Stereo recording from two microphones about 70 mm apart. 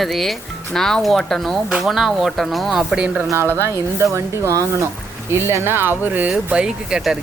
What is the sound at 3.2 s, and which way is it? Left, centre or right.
Speech, right.